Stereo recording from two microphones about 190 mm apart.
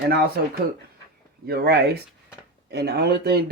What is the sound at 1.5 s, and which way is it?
Speech, 55° right (ahead or behind).